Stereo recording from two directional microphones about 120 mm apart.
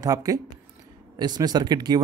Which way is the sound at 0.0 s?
30° right (ahead or behind).